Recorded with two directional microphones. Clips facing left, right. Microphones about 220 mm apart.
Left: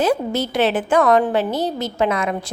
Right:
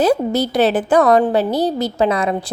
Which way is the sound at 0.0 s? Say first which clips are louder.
Right 4 dB; 35° right (ahead or behind).